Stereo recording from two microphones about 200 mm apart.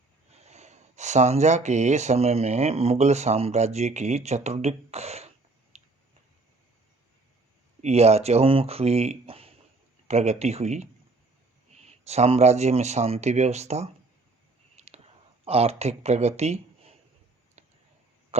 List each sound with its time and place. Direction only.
0.3 s speech: 35° right (ahead or behind)
5.7 s finger snapping: 30° right (ahead or behind)
7.8 s speech: 30° right (ahead or behind)
14.8 s a sound: 30° right (ahead or behind)